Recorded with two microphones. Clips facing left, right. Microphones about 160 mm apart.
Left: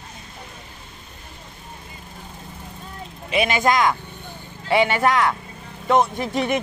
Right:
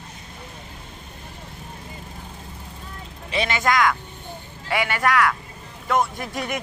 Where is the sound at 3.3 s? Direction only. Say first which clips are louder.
Left 3 dB; 15° left (ahead or behind).